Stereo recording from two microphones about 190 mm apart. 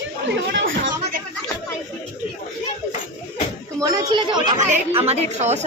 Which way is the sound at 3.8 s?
20° right (ahead or behind).